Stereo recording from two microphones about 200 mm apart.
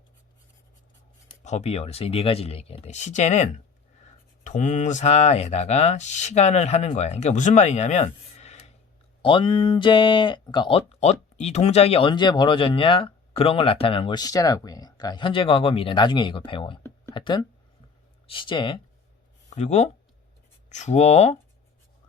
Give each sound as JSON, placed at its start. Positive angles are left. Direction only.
{"t": 1.5, "sound": "speech", "side_deg": 35}